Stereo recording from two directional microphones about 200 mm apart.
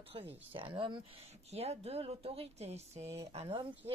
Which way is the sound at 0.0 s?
25° right (ahead or behind).